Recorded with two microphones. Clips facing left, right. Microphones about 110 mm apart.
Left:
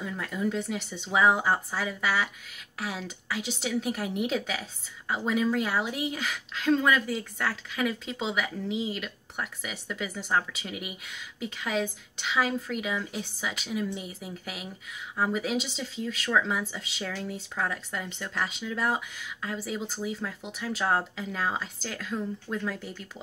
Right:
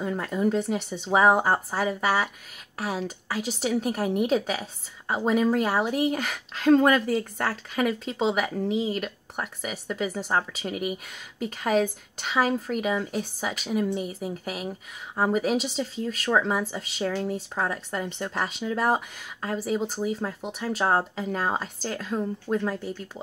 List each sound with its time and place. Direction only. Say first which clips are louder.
0.0 s a woman's voice: right 5 dB; 40° right (ahead or behind)